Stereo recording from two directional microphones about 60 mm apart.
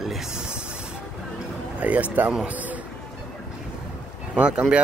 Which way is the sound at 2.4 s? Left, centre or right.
Right.